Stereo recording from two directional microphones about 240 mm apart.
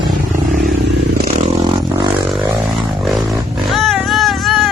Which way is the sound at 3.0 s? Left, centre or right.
Centre.